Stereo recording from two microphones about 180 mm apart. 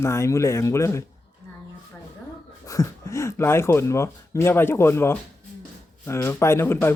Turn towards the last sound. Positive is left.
turn(degrees=15)  # may be behind; listen again after turning